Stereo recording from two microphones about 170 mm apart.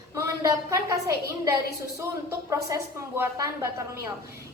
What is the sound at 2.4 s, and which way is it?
A woman's voice, 20° right (ahead or behind).